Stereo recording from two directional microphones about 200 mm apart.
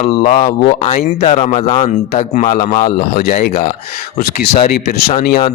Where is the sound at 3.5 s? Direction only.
35° left (ahead or behind).